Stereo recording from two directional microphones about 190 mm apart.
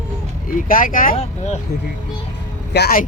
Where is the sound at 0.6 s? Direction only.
45° left (ahead or behind).